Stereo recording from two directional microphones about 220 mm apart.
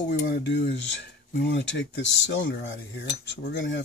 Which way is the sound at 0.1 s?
55° left (ahead or behind).